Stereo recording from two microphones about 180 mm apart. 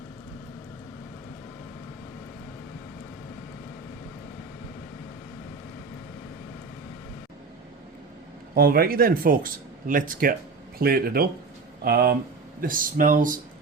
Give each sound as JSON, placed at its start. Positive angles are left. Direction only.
{"t": 8.5, "sound": "speech", "side_deg": -55}